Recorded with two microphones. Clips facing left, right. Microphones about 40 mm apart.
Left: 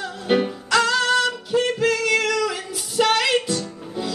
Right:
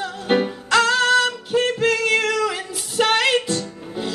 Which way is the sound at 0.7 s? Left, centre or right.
Right.